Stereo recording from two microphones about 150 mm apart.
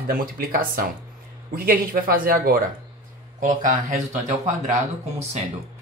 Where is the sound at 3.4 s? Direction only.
55° right (ahead or behind).